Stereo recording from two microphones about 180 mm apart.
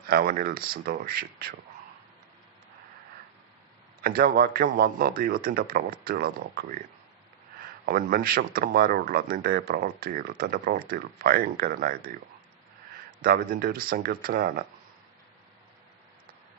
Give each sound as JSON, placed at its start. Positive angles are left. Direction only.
{"t": 0.1, "sound": "speech", "side_deg": -50}
{"t": 4.0, "sound": "speech", "side_deg": -55}
{"t": 7.9, "sound": "speech", "side_deg": -55}
{"t": 13.2, "sound": "speech", "side_deg": -55}